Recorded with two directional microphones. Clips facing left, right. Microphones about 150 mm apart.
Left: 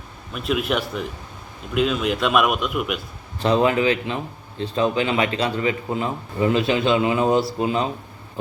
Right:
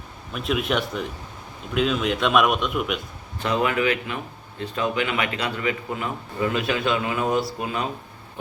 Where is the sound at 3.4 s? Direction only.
30° left (ahead or behind).